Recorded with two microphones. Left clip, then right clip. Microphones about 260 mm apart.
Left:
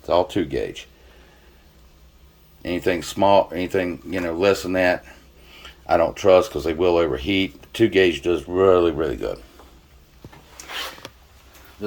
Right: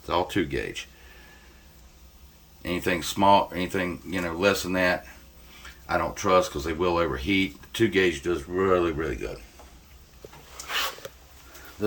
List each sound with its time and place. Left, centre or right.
0.0 s speech: centre
2.6 s speech: centre
6.5 s speech: right
7.2 s speech: centre